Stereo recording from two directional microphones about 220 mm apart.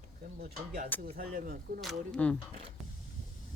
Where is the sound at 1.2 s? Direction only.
40° right (ahead or behind).